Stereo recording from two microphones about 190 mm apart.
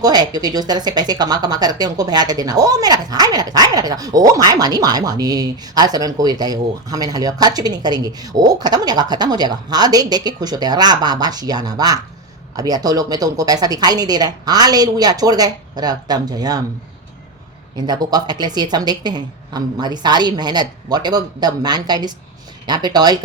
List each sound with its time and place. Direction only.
0.0 s speech: 20° right (ahead or behind)
17.7 s speech: 20° right (ahead or behind)